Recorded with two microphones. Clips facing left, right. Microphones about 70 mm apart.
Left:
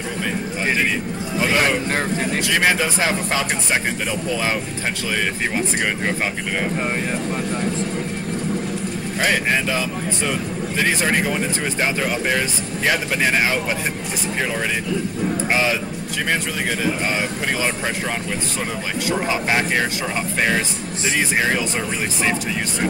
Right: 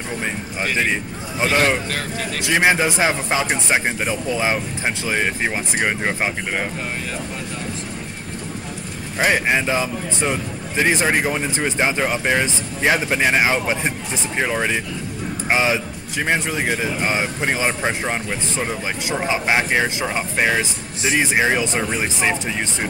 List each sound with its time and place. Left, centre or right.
1.4 s speech: right
1.9 s speech: left
2.4 s speech: centre
9.2 s speech: centre